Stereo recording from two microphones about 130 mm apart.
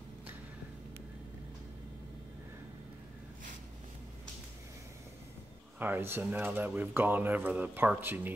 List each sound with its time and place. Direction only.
5.8 s speech: 15° right (ahead or behind)